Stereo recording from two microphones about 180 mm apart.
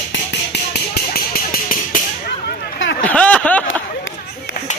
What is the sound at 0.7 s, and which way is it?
Music, 60° left (ahead or behind).